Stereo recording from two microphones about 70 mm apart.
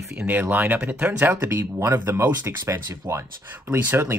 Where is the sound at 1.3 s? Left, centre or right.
Right.